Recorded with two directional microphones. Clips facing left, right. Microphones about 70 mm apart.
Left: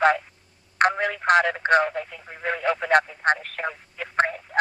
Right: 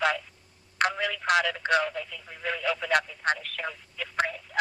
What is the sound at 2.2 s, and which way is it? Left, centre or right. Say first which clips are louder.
Telephone: left 5 dB; left.